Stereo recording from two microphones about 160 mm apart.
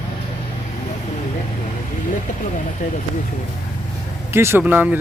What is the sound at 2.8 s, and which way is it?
Speech, 50° left (ahead or behind).